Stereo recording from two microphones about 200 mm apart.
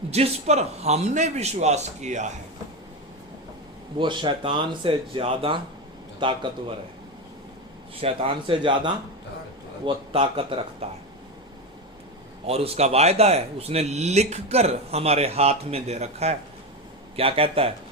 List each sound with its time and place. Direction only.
0.1 s speech: 35° right (ahead or behind)
3.9 s speech: 25° right (ahead or behind)
8.0 s speech: 30° right (ahead or behind)
12.5 s speech: 30° right (ahead or behind)